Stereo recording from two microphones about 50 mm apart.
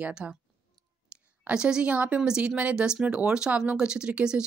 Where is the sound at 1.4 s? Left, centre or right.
Centre.